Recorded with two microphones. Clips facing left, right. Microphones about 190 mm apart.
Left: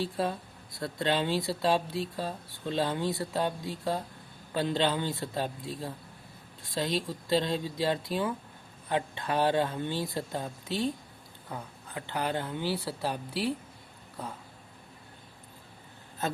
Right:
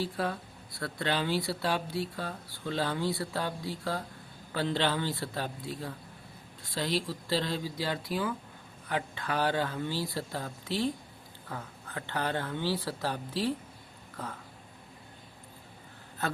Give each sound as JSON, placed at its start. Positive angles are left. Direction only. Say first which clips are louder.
{"t": 0.0, "sound": "speech", "louder": "left 2 dB", "side_deg": 25}